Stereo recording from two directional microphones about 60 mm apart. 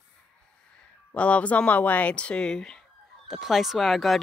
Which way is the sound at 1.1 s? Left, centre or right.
Left.